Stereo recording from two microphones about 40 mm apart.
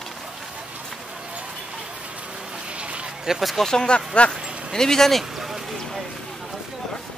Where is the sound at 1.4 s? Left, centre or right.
Centre.